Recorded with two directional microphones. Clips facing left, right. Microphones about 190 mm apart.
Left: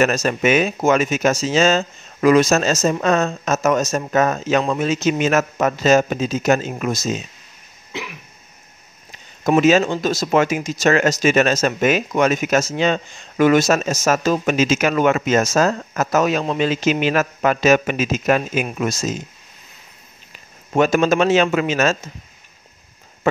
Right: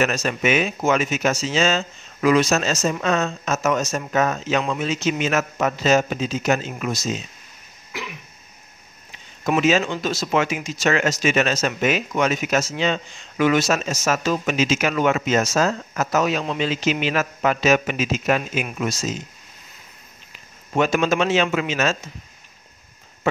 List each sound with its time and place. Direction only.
0.0 s speech: 45° left (ahead or behind)
7.9 s cough: 25° left (ahead or behind)
9.4 s speech: 40° left (ahead or behind)
20.7 s speech: 45° left (ahead or behind)